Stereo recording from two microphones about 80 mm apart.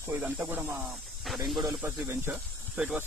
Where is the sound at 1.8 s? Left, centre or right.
Right.